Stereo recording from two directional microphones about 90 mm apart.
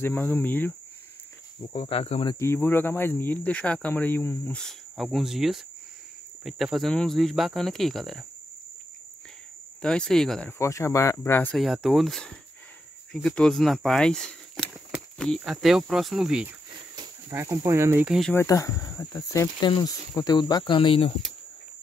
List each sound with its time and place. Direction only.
0.0 s speech: 20° left (ahead or behind)
1.7 s speech: 90° left
2.3 s speech: 30° left (ahead or behind)
4.5 s speech: 10° left (ahead or behind)
9.8 s speech: 10° left (ahead or behind)
10.6 s speech: 35° left (ahead or behind)
11.5 s speech: centre (ahead or behind)
17.3 s speech: 30° right (ahead or behind)
18.5 s speech: 40° left (ahead or behind)
19.8 s speech: 45° left (ahead or behind)
20.6 s speech: 70° left (ahead or behind)